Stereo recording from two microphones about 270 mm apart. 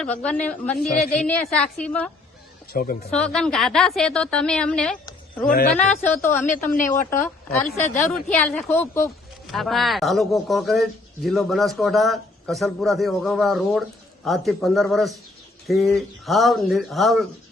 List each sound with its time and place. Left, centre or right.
0.0 s speech: centre
2.7 s speech: left
3.1 s speech: centre
6.0 s a woman's voice: left
7.7 s speech: centre